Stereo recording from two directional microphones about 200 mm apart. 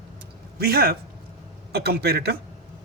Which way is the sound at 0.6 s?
50° right (ahead or behind).